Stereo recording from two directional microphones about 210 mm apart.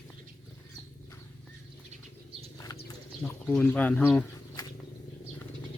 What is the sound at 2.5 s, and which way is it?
Bird, 20° left (ahead or behind).